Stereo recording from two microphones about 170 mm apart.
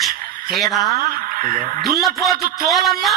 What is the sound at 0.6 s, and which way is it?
Speech, centre (ahead or behind).